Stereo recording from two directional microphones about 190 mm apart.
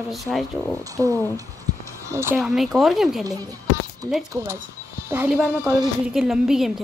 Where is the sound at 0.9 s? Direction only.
15° right (ahead or behind).